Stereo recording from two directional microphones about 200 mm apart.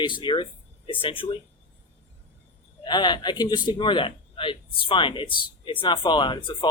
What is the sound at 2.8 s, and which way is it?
Speech, 20° left (ahead or behind).